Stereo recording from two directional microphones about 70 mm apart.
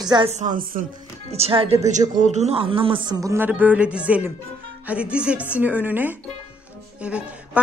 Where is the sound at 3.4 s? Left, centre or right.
Right.